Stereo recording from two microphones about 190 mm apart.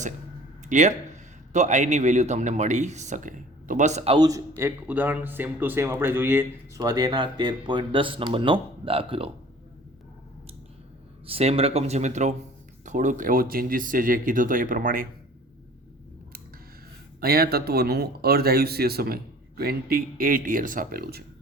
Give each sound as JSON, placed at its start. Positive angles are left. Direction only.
{"t": 0.7, "sound": "a man's voice", "side_deg": -40}
{"t": 4.3, "sound": "speech", "side_deg": -15}
{"t": 11.3, "sound": "a man's voice", "side_deg": -30}
{"t": 17.2, "sound": "a man's voice", "side_deg": -55}